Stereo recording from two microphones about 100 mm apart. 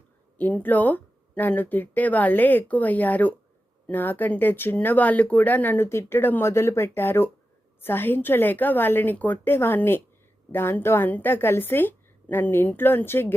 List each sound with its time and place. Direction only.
0.3 s speech: 20° left (ahead or behind)